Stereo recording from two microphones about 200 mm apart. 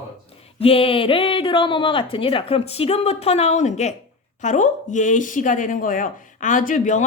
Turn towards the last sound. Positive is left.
turn(degrees=40)  # may be behind; listen again after turning